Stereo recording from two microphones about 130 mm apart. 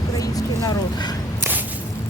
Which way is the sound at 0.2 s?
30° left (ahead or behind).